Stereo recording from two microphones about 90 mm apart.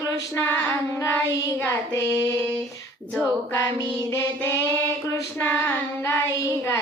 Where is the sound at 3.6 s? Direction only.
40° left (ahead or behind).